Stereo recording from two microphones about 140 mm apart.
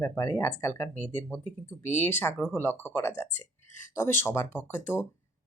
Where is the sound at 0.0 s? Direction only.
20° left (ahead or behind).